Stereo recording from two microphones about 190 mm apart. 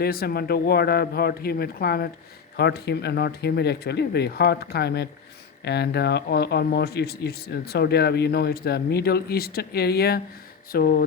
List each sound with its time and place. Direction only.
0.0 s speech: 55° left (ahead or behind)